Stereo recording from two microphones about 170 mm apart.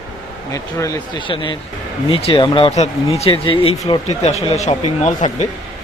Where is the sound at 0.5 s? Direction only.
20° left (ahead or behind); by 5.1 s 40° left (ahead or behind).